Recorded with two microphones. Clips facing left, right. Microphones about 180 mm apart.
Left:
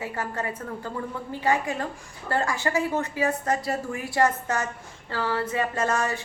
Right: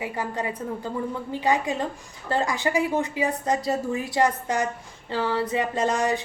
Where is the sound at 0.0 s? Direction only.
15° right (ahead or behind).